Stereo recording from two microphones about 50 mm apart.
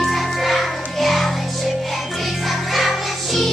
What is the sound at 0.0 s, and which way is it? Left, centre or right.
Music, centre.